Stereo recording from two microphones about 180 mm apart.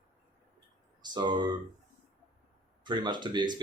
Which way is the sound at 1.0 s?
25° right (ahead or behind).